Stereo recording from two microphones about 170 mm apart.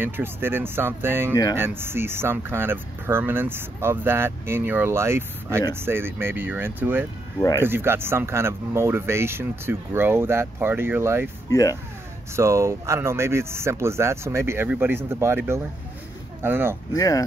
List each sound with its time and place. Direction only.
0.0 s speech: 15° right (ahead or behind)
11.5 s speech: 20° left (ahead or behind)
12.4 s speech: 15° right (ahead or behind)
16.9 s speech: 20° left (ahead or behind)